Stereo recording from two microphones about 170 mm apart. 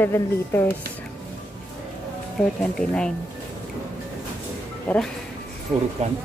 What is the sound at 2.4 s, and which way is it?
Speech, 5° left (ahead or behind).